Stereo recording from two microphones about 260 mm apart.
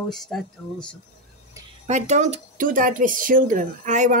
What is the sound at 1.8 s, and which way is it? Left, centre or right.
Speech, right.